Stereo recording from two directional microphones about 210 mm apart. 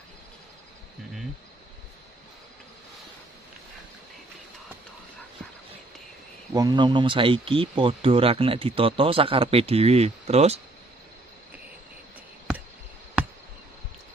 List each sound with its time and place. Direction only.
6.5 s speech: 20° right (ahead or behind)